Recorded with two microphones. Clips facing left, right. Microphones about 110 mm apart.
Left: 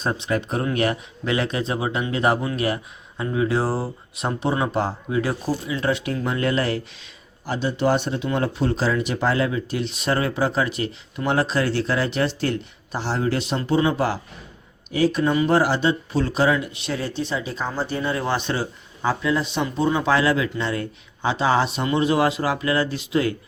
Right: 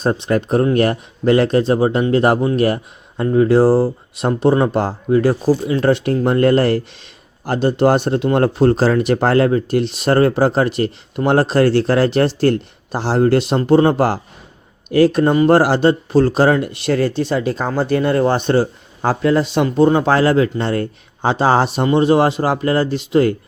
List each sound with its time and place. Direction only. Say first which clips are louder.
0.3 s speech: right 9 dB; 45° right (ahead or behind); by 15.8 s 65° right (ahead or behind)
15.8 s speech: right 9 dB; 45° right (ahead or behind)
18.2 s speech: right 9 dB; 45° right (ahead or behind)